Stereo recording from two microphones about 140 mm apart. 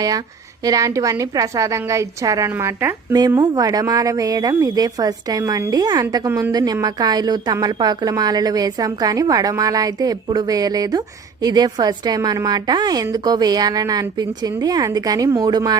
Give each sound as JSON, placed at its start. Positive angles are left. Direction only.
{"t": 0.6, "sound": "a woman's voice", "side_deg": -25}